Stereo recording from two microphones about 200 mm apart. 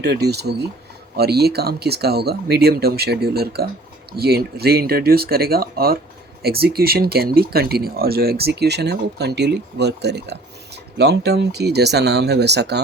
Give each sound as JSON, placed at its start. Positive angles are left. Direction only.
{"t": 0.0, "sound": "speech", "side_deg": -55}